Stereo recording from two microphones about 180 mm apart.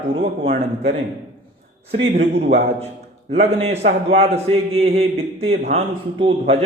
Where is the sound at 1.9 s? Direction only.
35° right (ahead or behind).